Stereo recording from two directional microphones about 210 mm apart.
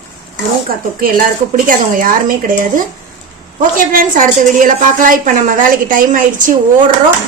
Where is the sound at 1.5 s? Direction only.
40° right (ahead or behind).